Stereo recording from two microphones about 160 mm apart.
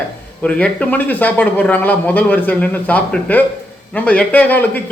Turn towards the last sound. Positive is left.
turn(degrees=10)  # may be behind; listen again after turning